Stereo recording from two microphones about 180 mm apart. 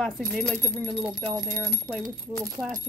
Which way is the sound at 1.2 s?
20° right (ahead or behind).